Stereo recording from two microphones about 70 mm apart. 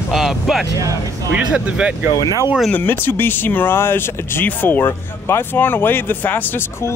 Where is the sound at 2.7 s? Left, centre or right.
Left.